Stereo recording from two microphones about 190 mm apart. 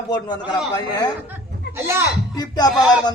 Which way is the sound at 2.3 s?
20° left (ahead or behind).